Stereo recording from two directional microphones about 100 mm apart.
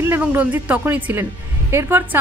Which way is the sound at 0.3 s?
15° right (ahead or behind).